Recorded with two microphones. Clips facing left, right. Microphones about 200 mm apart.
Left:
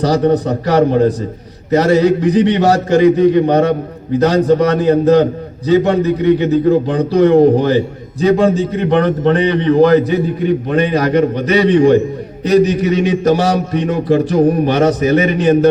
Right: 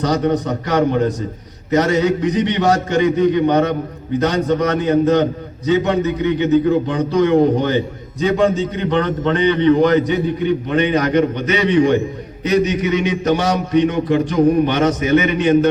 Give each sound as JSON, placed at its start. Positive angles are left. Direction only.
{"t": 0.0, "sound": "a man's voice", "side_deg": 35}